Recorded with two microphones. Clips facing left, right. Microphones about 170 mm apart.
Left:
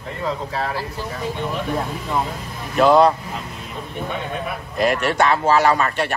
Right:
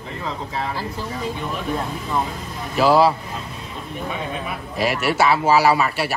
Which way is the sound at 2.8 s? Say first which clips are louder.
Left 2 dB; 5° right (ahead or behind).